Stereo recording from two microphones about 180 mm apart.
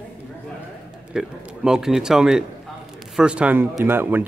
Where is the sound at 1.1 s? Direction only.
5° right (ahead or behind).